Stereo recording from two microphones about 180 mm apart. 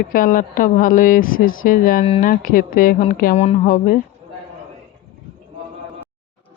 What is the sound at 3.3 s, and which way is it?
Speech, 35° left (ahead or behind).